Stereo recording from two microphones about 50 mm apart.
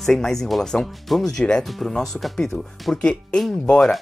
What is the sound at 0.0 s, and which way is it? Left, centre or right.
Speech, centre.